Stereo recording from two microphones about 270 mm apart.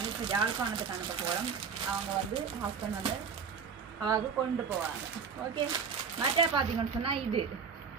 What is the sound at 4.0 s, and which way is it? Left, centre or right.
Speech, centre.